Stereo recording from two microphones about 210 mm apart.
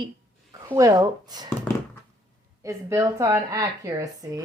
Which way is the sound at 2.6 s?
15° right (ahead or behind).